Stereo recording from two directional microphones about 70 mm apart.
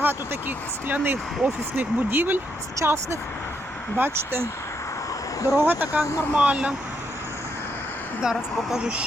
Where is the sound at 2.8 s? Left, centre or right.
Right.